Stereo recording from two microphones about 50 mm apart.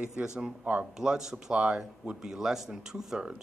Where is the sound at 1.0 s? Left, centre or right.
Centre.